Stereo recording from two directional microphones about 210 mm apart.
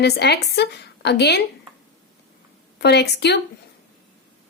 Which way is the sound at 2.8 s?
55° left (ahead or behind).